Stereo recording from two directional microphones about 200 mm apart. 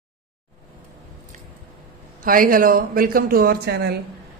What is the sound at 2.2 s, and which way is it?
Speech, 45° right (ahead or behind).